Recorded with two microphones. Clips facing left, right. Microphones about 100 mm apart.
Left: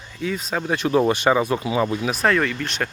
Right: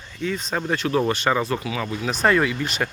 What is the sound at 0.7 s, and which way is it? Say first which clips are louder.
Speech: left 3 dB; 15° left (ahead or behind).